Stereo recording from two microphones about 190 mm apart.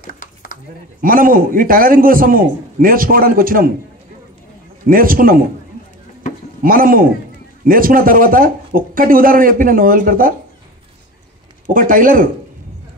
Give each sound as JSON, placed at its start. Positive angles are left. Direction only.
{"t": 1.0, "sound": "speech", "side_deg": -50}
{"t": 4.8, "sound": "speech", "side_deg": -50}
{"t": 6.6, "sound": "speech", "side_deg": -50}
{"t": 11.7, "sound": "speech", "side_deg": -45}